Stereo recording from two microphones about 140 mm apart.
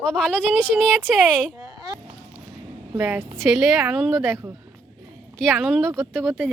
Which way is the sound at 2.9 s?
10° right (ahead or behind).